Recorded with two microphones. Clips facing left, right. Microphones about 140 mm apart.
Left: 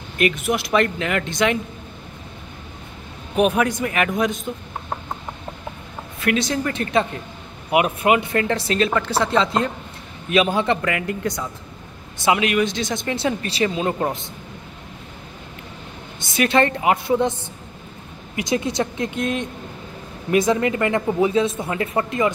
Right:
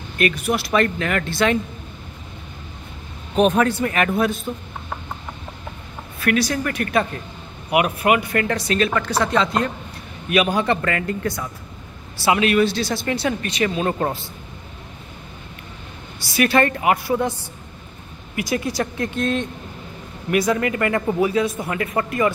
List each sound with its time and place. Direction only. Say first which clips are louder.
0.2 s speech: even; 20° left (ahead or behind)
3.3 s a man's voice: right 2 dB; 10° left (ahead or behind)
6.2 s speech: right 1 dB; 25° left (ahead or behind)
13.9 s a man's voice: even; 10° left (ahead or behind)
16.2 s speech: even; 20° left (ahead or behind)
18.3 s speech: left 1 dB; 20° left (ahead or behind)